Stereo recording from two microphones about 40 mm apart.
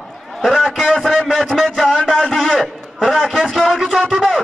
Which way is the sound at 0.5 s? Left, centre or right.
Centre.